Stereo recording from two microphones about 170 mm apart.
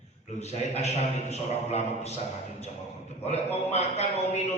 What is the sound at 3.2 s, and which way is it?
A man's voice, 40° left (ahead or behind).